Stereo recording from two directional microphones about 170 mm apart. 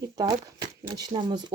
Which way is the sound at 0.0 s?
20° right (ahead or behind).